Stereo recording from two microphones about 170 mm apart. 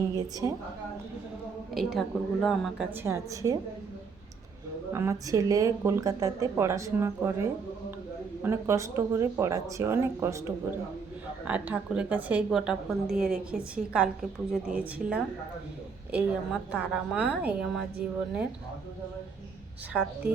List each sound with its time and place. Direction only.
0.4 s a woman's voice: 20° right (ahead or behind)
1.7 s a woman's voice: centre (ahead or behind)
3.0 s speech: 15° right (ahead or behind)
4.9 s speech: 15° right (ahead or behind)
8.4 s speech: 15° right (ahead or behind)
11.4 s a woman's voice: 10° right (ahead or behind)
19.9 s speech: 5° right (ahead or behind)